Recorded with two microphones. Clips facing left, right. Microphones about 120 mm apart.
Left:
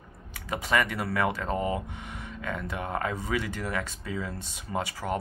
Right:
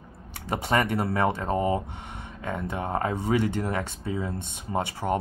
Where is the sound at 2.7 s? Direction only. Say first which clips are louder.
Right 4 dB; 30° right (ahead or behind).